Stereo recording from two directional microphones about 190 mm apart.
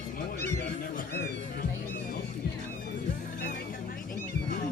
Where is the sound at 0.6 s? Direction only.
55° left (ahead or behind).